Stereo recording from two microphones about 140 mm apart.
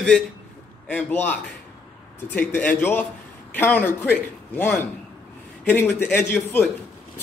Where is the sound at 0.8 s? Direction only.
10° left (ahead or behind).